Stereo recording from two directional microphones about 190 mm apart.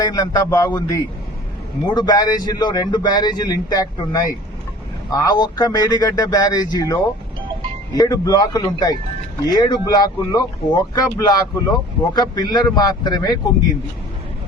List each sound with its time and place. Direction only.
0.0 s a man's voice: 20° left (ahead or behind)